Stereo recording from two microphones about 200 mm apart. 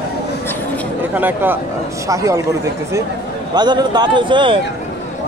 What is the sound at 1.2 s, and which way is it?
Speech, 10° right (ahead or behind).